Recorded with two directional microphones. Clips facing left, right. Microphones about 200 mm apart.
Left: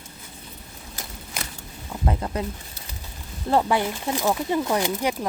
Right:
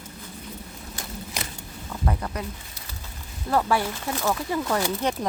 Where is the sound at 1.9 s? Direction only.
25° left (ahead or behind).